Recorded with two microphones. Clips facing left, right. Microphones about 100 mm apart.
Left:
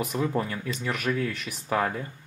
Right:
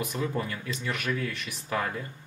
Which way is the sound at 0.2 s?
25° left (ahead or behind).